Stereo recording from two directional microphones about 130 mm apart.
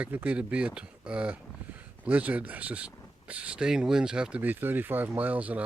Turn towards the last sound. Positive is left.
turn(degrees=-10)  # may be behind; listen again after turning